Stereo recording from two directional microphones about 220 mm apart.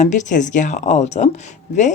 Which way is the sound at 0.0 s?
35° left (ahead or behind).